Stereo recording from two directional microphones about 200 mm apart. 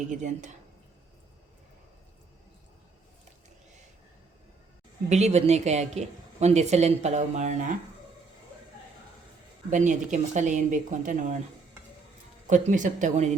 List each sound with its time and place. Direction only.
0.1 s a woman's voice: 40° right (ahead or behind)
5.0 s a woman's voice: 35° right (ahead or behind)
9.6 s a woman's voice: 40° right (ahead or behind)
12.5 s a woman's voice: 35° right (ahead or behind)